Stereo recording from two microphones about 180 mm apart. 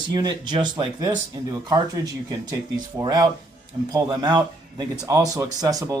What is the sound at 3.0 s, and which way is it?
Speech, 25° right (ahead or behind).